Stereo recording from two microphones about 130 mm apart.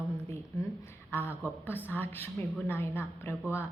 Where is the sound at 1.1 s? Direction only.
15° left (ahead or behind).